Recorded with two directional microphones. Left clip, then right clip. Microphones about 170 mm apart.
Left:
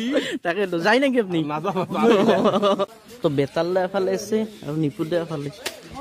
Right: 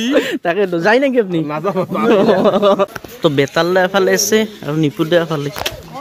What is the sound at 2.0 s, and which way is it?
Speech, centre (ahead or behind).